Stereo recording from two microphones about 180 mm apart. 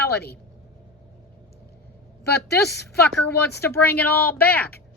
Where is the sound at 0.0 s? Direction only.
60° left (ahead or behind).